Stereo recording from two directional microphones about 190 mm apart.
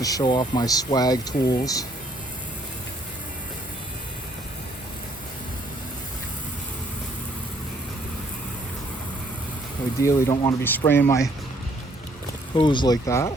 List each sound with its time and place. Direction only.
0.0 s speech: 20° left (ahead or behind)
10.0 s speech: 15° left (ahead or behind)
12.5 s speech: 25° left (ahead or behind)